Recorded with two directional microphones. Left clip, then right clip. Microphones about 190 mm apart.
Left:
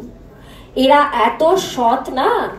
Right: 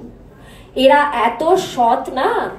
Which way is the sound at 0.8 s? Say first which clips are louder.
Even; 20° right (ahead or behind).